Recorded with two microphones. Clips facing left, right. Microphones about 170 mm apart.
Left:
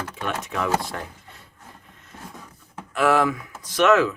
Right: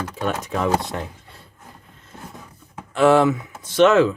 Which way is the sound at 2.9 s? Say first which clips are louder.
Right 5 dB; 25° right (ahead or behind).